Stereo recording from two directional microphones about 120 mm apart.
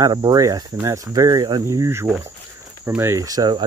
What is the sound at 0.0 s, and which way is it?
Speech, 35° right (ahead or behind).